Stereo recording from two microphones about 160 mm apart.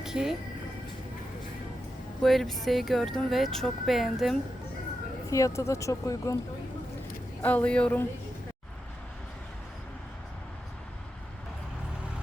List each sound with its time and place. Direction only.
0.0 s speech: 5° right (ahead or behind)
2.2 s speech: centre (ahead or behind)
5.3 s speech: 20° left (ahead or behind)
7.4 s speech: 10° left (ahead or behind)